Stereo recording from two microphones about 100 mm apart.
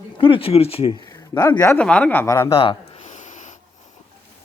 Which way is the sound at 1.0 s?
40° left (ahead or behind).